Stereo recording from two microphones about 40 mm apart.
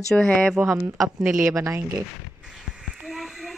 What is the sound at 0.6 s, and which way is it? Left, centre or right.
Speech, right.